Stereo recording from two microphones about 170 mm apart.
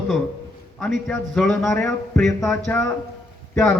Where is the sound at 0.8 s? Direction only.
Centre (ahead or behind).